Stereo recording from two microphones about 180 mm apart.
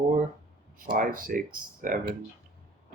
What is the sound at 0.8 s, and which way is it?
Speech, 50° right (ahead or behind).